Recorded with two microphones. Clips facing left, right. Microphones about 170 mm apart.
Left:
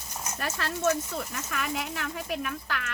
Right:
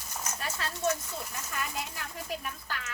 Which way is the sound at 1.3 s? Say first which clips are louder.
Left 3 dB; 70° left (ahead or behind).